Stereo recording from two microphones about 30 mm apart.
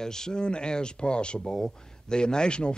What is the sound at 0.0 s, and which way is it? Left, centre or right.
Speech, left.